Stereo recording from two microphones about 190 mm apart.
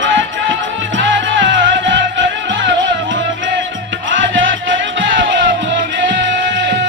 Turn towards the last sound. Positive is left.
turn(degrees=-75)  # may be behind; listen again after turning